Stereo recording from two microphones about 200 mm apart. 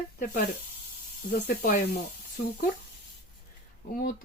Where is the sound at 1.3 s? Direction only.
50° left (ahead or behind).